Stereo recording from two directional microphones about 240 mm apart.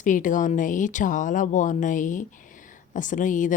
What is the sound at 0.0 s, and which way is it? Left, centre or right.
Speech, left.